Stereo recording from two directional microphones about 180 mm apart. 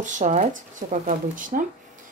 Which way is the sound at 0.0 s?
45° right (ahead or behind).